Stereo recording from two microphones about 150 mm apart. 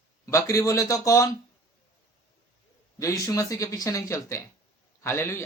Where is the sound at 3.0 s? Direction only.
20° left (ahead or behind).